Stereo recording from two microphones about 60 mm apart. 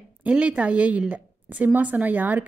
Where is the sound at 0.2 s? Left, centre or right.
Centre.